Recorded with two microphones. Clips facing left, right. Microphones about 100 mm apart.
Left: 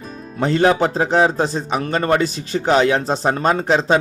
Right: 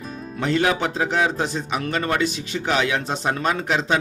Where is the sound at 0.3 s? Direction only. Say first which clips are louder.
Left 5 dB; 30° left (ahead or behind).